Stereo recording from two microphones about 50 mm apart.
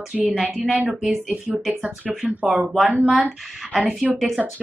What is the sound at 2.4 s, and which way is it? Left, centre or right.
Speech, centre.